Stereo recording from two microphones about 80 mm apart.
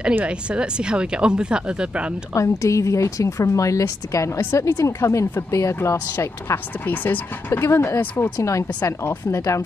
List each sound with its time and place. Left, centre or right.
0.1 s speech: centre
2.3 s a woman's voice: left
6.1 s a woman's voice: left